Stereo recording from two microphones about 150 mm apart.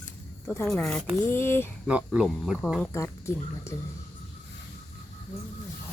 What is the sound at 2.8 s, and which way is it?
Speech, 20° left (ahead or behind).